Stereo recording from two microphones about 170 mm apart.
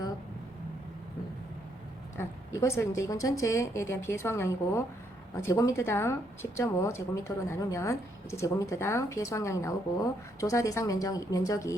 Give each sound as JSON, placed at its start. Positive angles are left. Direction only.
{"t": 2.1, "sound": "speech", "side_deg": 15}